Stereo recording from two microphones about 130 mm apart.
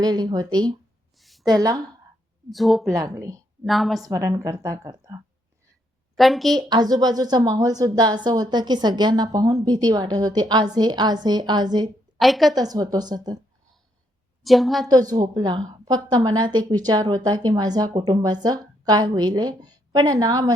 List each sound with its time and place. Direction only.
0.0 s a woman's voice: 30° right (ahead or behind)
1.1 s a sound: centre (ahead or behind)
1.5 s a woman's voice: 30° right (ahead or behind)
2.5 s speech: centre (ahead or behind)
2.9 s a woman's voice: 25° right (ahead or behind)
3.7 s speech: centre (ahead or behind)
4.0 s a woman's voice: 25° right (ahead or behind)
6.1 s speech: centre (ahead or behind)
6.5 s a woman's voice: 30° right (ahead or behind)
12.2 s speech: centre (ahead or behind)
12.5 s a woman's voice: 30° right (ahead or behind)
14.4 s speech: centre (ahead or behind)
14.8 s a woman's voice: 30° right (ahead or behind)